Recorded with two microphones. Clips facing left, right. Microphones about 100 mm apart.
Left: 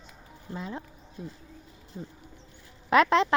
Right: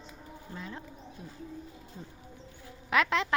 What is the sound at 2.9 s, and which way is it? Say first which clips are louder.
Speech: left 6 dB; 35° left (ahead or behind).